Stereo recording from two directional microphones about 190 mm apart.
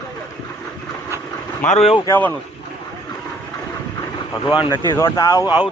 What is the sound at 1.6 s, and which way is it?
Speech, 35° left (ahead or behind).